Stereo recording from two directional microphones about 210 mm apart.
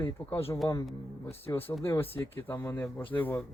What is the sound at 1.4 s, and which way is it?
Speech, 10° left (ahead or behind).